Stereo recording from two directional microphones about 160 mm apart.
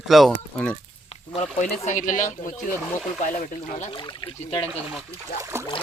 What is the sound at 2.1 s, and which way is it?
Speech, 55° left (ahead or behind).